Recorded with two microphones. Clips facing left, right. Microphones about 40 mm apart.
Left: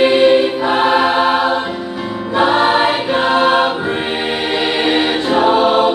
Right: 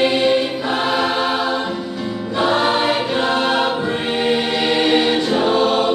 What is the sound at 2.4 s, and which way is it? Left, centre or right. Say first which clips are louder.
Choir: left 4 dB; centre.